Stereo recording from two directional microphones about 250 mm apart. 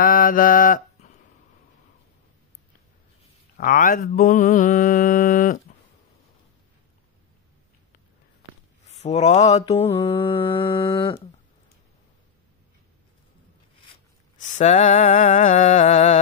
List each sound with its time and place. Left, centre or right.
0.0 s mantra: left
3.5 s mantra: left
8.8 s speech: left
9.8 s mantra: left
14.3 s mantra: left